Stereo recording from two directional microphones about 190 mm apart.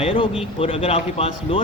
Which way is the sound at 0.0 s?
30° left (ahead or behind).